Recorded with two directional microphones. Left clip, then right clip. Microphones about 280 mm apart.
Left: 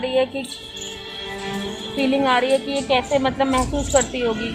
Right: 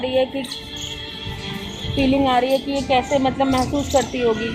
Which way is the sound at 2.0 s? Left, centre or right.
Left.